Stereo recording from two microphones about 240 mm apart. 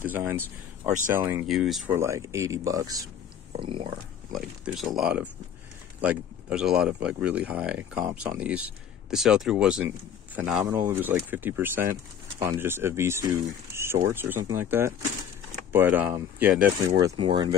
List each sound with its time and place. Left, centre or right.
0.0 s speech: centre
2.0 s speech: centre
4.3 s speech: centre